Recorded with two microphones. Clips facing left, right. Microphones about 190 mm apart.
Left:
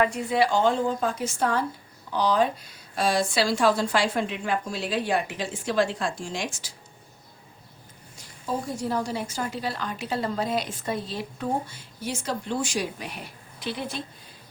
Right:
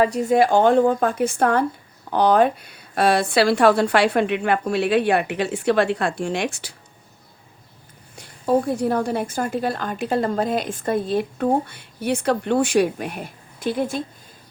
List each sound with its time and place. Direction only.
0.0 s a woman's voice: 40° right (ahead or behind); by 6.7 s 65° right (ahead or behind)
8.1 s a woman's voice: 60° right (ahead or behind)